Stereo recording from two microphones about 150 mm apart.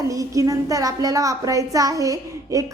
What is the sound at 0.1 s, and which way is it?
A woman's voice, 20° right (ahead or behind).